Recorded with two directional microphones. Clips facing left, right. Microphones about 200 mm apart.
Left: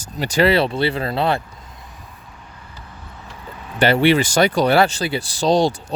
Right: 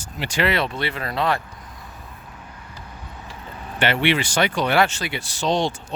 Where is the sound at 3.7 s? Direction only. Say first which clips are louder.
Left 6 dB; 40° left (ahead or behind).